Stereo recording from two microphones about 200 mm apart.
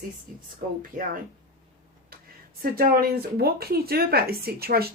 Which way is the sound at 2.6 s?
45° right (ahead or behind).